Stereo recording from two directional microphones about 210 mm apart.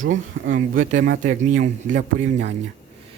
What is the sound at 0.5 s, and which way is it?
Speech, 40° right (ahead or behind).